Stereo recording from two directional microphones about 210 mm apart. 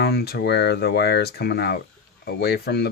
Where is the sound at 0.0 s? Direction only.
50° left (ahead or behind).